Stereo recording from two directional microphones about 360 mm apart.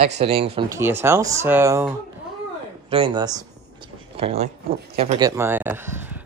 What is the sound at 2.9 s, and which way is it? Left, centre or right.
Speech, centre.